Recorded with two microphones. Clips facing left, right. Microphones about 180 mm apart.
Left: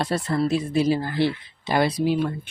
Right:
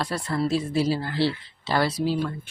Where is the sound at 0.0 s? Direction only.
25° left (ahead or behind).